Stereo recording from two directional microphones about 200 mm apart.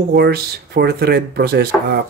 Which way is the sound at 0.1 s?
50° right (ahead or behind).